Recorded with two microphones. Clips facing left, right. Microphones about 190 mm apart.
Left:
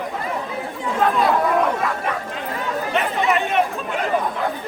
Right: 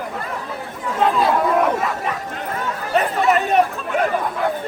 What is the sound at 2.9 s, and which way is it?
Chatter, 40° right (ahead or behind).